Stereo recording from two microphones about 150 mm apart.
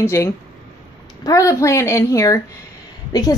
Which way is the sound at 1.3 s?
20° left (ahead or behind).